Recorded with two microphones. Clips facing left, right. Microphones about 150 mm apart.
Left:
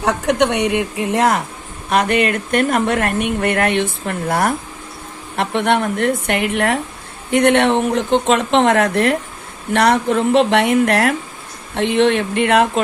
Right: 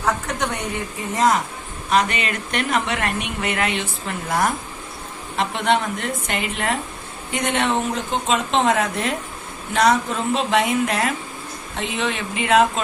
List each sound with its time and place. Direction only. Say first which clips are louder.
0.0 s a woman's voice: left 7 dB; 75° left (ahead or behind)
1.9 s a woman's voice: left 5 dB; 55° left (ahead or behind)